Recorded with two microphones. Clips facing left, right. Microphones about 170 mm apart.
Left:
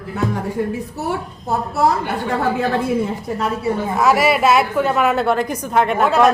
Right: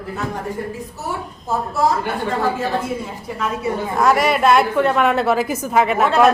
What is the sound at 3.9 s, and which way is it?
A woman's voice, 5° left (ahead or behind).